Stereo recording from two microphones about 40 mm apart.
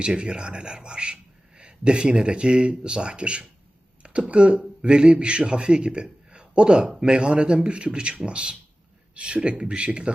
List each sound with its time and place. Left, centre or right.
0.0 s a man's voice: right